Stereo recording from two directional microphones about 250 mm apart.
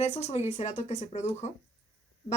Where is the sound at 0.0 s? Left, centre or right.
Left.